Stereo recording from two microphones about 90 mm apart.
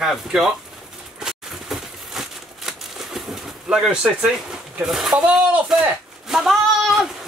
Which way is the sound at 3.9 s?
10° right (ahead or behind).